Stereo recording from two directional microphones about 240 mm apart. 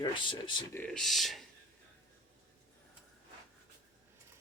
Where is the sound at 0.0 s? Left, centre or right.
Centre.